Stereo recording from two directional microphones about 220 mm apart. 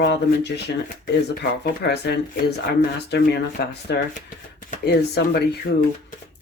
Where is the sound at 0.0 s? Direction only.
50° left (ahead or behind).